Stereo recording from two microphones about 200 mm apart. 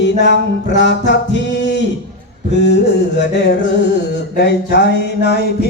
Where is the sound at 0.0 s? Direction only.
60° left (ahead or behind).